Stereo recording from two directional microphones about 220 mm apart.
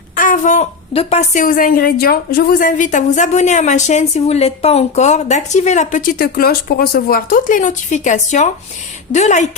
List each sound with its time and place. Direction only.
0.2 s a woman's voice: 35° left (ahead or behind)